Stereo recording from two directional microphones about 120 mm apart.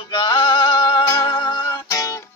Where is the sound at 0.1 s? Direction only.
40° left (ahead or behind).